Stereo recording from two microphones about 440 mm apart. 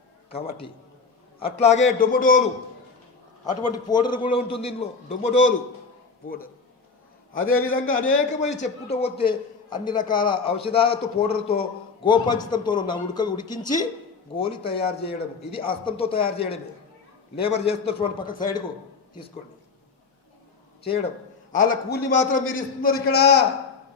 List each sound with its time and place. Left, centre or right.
0.3 s a man's voice: centre
3.4 s a man's voice: centre
21.5 s a man's voice: centre